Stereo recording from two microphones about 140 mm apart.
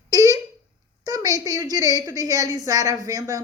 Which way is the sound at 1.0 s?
25° right (ahead or behind).